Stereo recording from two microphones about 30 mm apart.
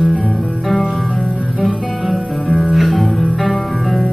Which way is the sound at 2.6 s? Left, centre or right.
Centre.